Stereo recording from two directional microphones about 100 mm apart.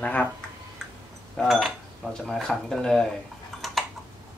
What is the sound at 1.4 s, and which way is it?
Speech, centre (ahead or behind).